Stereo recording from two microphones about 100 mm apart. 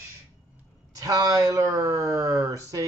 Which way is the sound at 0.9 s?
35° right (ahead or behind).